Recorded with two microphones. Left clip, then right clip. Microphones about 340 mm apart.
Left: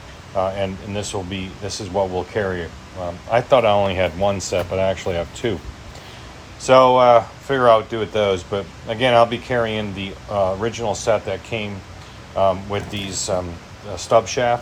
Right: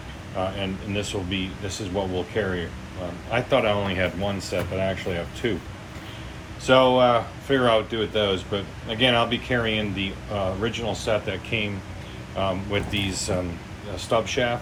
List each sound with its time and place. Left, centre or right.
0.3 s speech: centre
6.6 s speech: centre